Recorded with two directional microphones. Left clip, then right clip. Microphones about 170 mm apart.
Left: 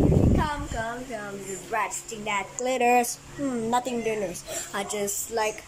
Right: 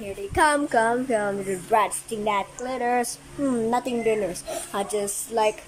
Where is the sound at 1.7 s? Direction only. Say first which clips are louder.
Right 7 dB; 30° right (ahead or behind).